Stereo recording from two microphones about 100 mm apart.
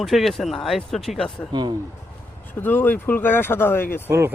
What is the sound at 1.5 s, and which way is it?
Speech, 50° right (ahead or behind).